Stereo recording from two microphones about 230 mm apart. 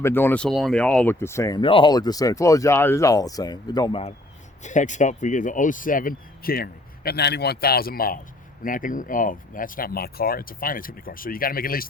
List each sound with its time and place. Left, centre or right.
0.0 s speech: centre
4.6 s speech: left